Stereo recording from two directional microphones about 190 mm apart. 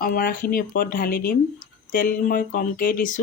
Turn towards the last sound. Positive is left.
turn(degrees=45)  # may be behind; listen again after turning